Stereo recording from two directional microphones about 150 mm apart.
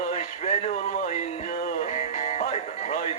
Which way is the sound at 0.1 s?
40° left (ahead or behind).